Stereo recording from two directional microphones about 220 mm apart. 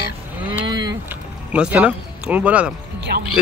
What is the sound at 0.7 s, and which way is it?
Vehicle, 20° right (ahead or behind).